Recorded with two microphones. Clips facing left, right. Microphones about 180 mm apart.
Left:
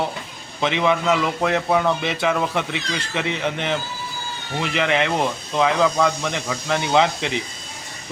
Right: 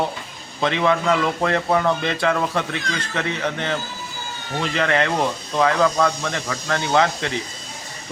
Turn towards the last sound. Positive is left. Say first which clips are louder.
# left 1 dB
turn(degrees=15)  # may be behind; listen again after turning